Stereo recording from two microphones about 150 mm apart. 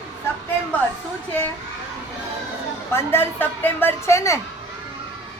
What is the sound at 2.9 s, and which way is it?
A woman's voice, 15° left (ahead or behind).